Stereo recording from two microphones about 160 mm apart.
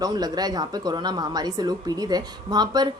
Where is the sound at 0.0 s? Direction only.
25° right (ahead or behind).